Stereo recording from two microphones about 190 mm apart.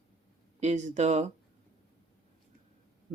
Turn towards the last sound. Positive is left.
turn(degrees=-40)  # may be behind; listen again after turning